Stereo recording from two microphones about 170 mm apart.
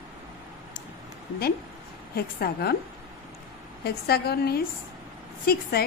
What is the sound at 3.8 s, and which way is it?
A woman's voice, 65° left (ahead or behind).